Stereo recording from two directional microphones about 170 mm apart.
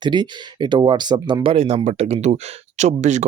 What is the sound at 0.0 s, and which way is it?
Speech, 25° right (ahead or behind).